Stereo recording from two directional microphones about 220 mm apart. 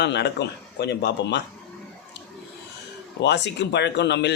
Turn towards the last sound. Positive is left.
turn(degrees=50)  # may be behind; listen again after turning